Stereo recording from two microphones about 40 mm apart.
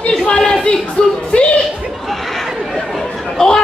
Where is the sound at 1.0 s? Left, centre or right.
Left.